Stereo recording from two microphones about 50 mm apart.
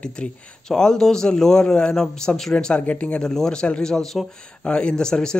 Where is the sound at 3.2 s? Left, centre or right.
Centre.